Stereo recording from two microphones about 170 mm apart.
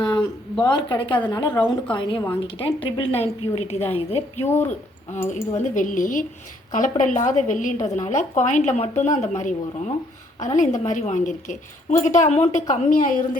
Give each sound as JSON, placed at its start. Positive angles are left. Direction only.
{"t": 0.0, "sound": "a sound", "side_deg": 25}
{"t": 0.6, "sound": "a woman's voice", "side_deg": 25}
{"t": 4.4, "sound": "a woman's voice", "side_deg": 10}
{"t": 5.3, "sound": "a woman's voice", "side_deg": 50}